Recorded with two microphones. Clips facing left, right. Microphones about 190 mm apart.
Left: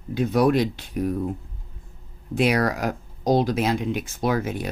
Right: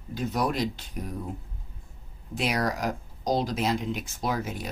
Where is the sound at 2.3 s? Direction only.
60° left (ahead or behind).